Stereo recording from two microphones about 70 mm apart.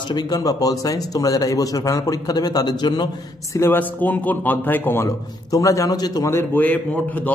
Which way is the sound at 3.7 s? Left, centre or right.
Left.